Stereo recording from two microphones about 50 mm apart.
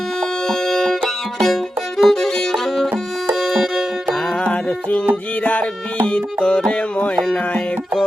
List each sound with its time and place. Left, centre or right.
0.4 s music: centre
3.4 s music: centre
4.4 s music: left